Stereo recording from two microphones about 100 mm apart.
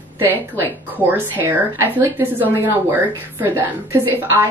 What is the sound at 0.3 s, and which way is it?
Speech, 20° left (ahead or behind).